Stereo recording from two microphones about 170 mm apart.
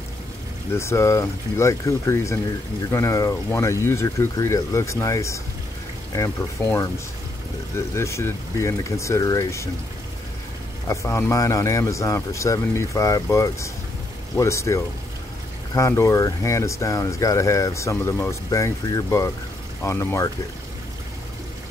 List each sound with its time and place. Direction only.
0.7 s speech: 15° left (ahead or behind)
10.9 s speech: 15° left (ahead or behind)